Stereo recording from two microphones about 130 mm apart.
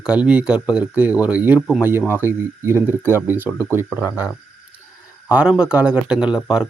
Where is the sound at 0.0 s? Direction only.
10° right (ahead or behind).